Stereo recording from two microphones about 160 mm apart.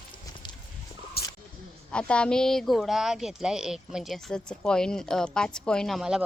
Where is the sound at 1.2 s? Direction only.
75° left (ahead or behind).